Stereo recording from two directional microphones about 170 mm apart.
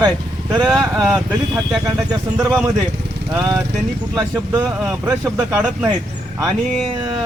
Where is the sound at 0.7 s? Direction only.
5° right (ahead or behind).